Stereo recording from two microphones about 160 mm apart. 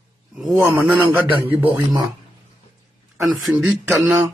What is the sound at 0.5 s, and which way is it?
Speech, 15° right (ahead or behind).